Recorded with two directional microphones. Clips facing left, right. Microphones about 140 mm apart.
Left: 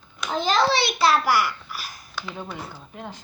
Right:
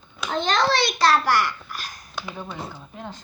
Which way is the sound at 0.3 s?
5° left (ahead or behind).